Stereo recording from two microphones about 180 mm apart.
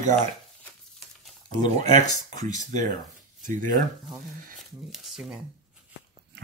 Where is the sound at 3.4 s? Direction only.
50° right (ahead or behind).